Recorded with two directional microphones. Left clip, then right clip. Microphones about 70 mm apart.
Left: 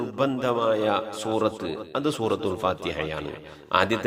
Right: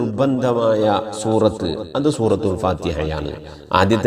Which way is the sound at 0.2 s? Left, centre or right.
Centre.